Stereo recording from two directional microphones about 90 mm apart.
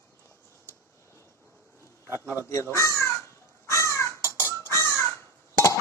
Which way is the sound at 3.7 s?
35° left (ahead or behind).